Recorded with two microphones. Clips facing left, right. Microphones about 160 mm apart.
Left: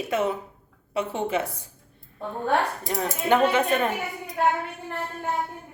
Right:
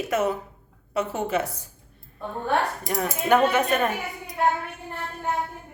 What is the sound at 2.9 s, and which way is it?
Speech, 25° left (ahead or behind).